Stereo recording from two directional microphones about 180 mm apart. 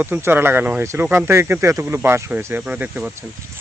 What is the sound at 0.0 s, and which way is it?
Speech, 10° right (ahead or behind).